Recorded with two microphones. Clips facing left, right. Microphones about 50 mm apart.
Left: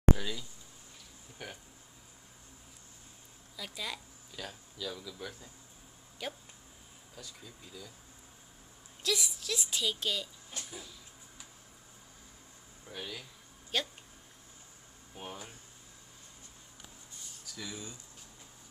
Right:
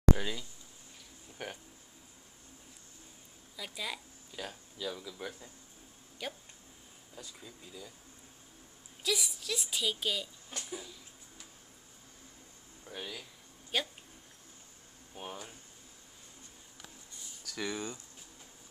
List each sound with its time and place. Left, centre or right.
0.2 s speech: centre
1.4 s speech: right
3.5 s speech: centre
4.4 s speech: right
6.2 s a woman's voice: centre
7.2 s speech: centre
9.0 s a woman's voice: centre
12.9 s speech: left
13.7 s speech: centre
15.1 s a woman's voice: centre
17.5 s speech: right